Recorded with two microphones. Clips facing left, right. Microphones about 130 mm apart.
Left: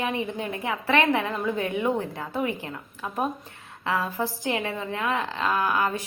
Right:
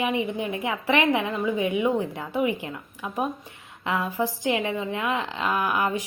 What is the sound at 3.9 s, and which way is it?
A woman's voice, 15° right (ahead or behind).